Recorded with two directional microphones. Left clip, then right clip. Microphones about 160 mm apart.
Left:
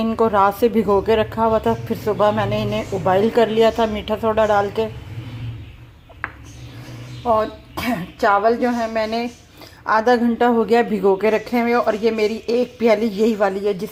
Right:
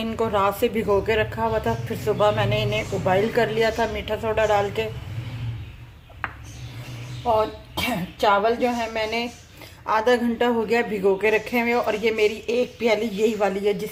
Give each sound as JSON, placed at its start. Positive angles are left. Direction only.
{"t": 0.0, "sound": "speech", "side_deg": 30}
{"t": 7.2, "sound": "speech", "side_deg": 30}
{"t": 9.8, "sound": "speech", "side_deg": 25}